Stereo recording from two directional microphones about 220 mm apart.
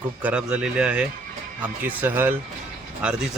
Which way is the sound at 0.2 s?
5° right (ahead or behind).